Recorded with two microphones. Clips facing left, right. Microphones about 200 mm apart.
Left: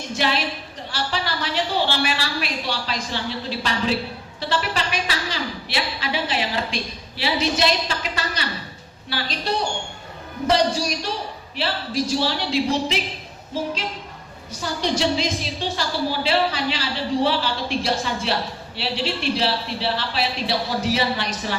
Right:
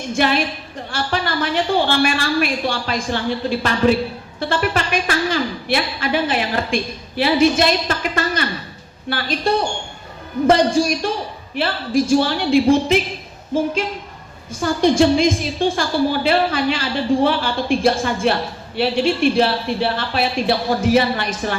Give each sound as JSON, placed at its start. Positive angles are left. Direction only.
{"t": 0.1, "sound": "a woman's voice", "side_deg": -50}
{"t": 14.5, "sound": "a woman's voice", "side_deg": -50}